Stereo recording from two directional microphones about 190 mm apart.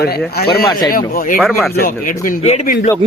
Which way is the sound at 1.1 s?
45° left (ahead or behind).